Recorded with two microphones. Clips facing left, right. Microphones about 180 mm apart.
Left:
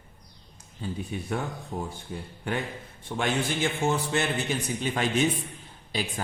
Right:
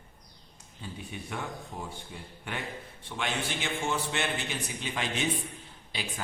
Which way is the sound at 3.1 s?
40° left (ahead or behind).